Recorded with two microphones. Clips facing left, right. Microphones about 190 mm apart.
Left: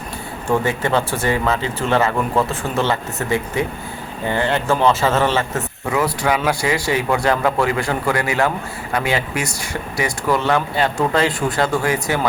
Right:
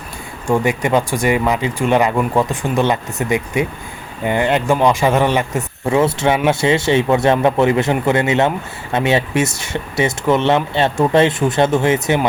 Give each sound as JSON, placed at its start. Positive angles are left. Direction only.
{"t": 0.4, "sound": "speech", "side_deg": -15}
{"t": 5.9, "sound": "a man's voice", "side_deg": -25}